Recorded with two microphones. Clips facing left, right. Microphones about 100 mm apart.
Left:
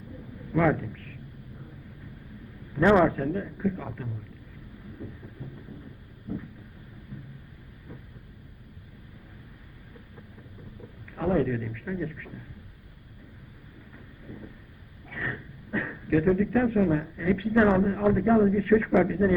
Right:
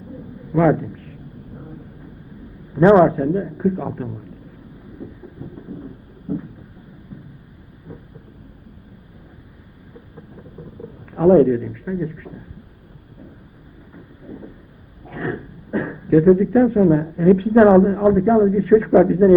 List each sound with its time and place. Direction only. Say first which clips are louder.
0.5 s a man's voice: right 8 dB; 25° right (ahead or behind)
2.8 s a man's voice: right 8 dB; 30° right (ahead or behind)
5.5 s a sound: right 10 dB; 35° right (ahead or behind)
11.1 s a man's voice: right 13 dB; 35° right (ahead or behind)
13.9 s vehicle: right 8 dB; 25° right (ahead or behind)
15.0 s a man's voice: right 9 dB; 35° right (ahead or behind)